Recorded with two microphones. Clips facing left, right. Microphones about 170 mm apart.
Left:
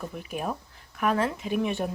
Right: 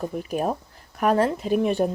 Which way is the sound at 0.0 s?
40° right (ahead or behind).